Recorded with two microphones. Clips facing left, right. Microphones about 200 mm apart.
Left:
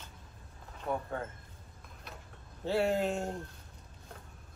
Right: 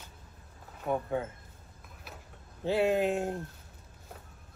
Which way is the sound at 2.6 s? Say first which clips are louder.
Right 3 dB; 20° right (ahead or behind).